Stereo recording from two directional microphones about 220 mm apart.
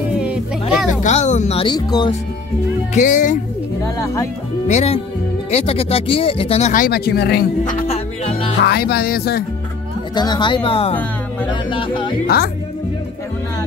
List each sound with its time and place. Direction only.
0.2 s a sound: 5° right (ahead or behind)
1.0 s speech: 35° left (ahead or behind)
2.9 s speech: 35° left (ahead or behind)
3.8 s speech: 15° left (ahead or behind)
4.6 s speech: 30° left (ahead or behind); by 7.4 s 50° left (ahead or behind)
7.8 s music: 25° left (ahead or behind)
8.5 s speech: 50° left (ahead or behind)
10.1 s speech: 20° left (ahead or behind)